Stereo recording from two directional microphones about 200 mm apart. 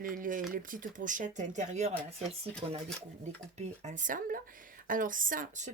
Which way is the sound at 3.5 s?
35° right (ahead or behind).